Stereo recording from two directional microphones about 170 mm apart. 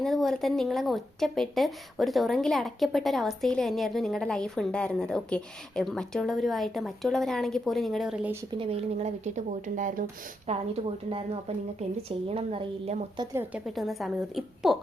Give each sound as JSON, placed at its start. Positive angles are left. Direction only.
{"t": 0.0, "sound": "speech", "side_deg": 0}
{"t": 8.5, "sound": "speech", "side_deg": -35}
{"t": 10.5, "sound": "a woman's voice", "side_deg": -35}
{"t": 13.5, "sound": "speech", "side_deg": 0}